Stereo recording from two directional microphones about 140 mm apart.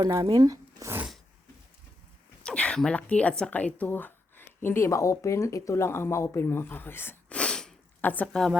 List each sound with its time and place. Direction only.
0.0 s speech: 30° right (ahead or behind)
2.4 s speech: 5° left (ahead or behind)